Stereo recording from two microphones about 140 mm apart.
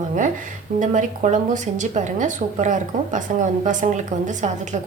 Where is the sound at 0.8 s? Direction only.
65° right (ahead or behind).